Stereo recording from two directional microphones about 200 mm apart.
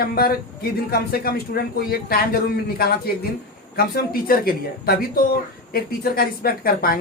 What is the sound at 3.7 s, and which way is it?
Speech, 50° left (ahead or behind).